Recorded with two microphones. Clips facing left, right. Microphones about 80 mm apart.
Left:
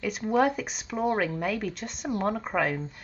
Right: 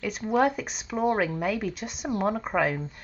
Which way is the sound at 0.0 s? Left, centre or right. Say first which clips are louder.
Even; centre.